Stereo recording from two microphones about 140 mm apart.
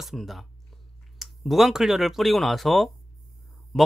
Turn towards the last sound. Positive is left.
turn(degrees=5)  # may be behind; listen again after turning